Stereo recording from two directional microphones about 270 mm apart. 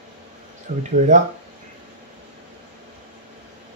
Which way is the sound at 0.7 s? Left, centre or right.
Right.